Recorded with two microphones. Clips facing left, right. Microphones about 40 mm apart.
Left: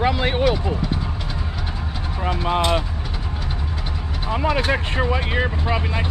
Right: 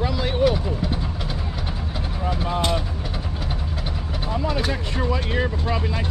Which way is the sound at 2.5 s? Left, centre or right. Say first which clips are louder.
Left 4 dB; left.